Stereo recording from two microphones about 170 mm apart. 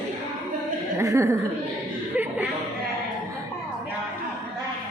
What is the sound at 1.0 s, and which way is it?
Speech, 15° right (ahead or behind).